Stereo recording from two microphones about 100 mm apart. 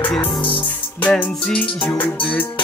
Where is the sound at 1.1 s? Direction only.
15° left (ahead or behind).